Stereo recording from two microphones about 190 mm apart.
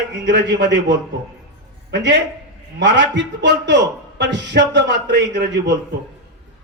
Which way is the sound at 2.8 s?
70° right (ahead or behind).